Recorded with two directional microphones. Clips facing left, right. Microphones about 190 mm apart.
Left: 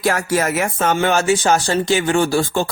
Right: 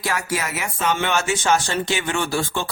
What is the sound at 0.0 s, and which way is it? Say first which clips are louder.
Speech: left 7 dB; 50° left (ahead or behind).